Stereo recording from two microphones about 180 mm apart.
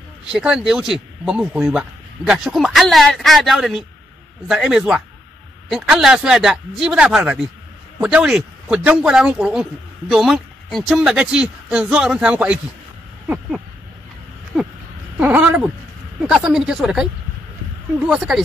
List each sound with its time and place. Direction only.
0.3 s speech: 5° right (ahead or behind)
15.1 s cat: 10° right (ahead or behind)
16.2 s speech: 5° right (ahead or behind)